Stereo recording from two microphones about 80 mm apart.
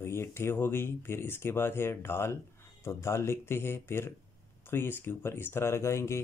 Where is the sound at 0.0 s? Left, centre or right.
Left.